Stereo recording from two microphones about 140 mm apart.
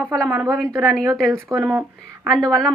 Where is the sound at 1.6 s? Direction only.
10° right (ahead or behind).